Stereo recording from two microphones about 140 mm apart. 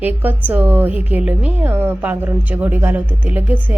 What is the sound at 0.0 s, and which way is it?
A woman's voice, 15° right (ahead or behind).